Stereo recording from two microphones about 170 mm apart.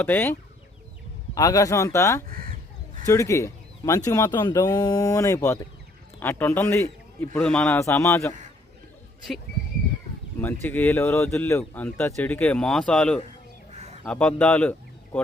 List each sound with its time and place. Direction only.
0.0 s speech: 10° left (ahead or behind)
1.4 s speech: 20° left (ahead or behind)
2.3 s crow: 55° right (ahead or behind)
3.1 s a man's voice: 15° left (ahead or behind)
10.4 s speech: 10° left (ahead or behind)
13.7 s a sound: 40° right (ahead or behind)
14.0 s speech: 10° left (ahead or behind)